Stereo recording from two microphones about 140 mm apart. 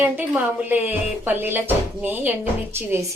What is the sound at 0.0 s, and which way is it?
Speech, 15° right (ahead or behind).